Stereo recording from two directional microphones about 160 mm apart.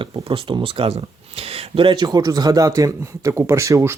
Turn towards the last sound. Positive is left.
turn(degrees=-20)  # may be behind; listen again after turning